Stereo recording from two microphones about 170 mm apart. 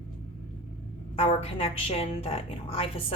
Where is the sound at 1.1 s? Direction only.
35° left (ahead or behind).